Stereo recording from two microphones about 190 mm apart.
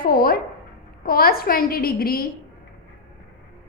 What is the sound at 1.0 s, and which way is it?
A woman's voice, 50° left (ahead or behind).